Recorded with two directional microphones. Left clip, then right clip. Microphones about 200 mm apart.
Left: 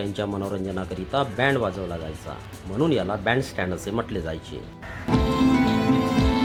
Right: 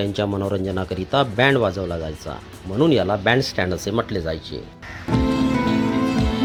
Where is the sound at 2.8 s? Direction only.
30° right (ahead or behind).